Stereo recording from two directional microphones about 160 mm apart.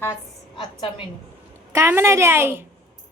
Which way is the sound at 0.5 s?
30° left (ahead or behind).